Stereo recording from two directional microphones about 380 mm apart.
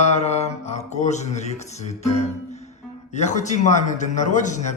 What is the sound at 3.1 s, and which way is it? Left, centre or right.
A man's voice, centre.